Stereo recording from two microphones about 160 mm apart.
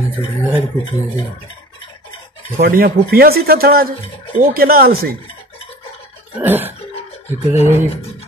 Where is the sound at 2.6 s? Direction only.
75° right (ahead or behind).